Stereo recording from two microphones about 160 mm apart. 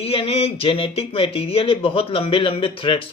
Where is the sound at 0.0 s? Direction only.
35° left (ahead or behind).